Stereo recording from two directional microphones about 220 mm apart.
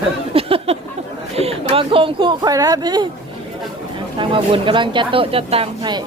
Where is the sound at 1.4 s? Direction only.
25° right (ahead or behind).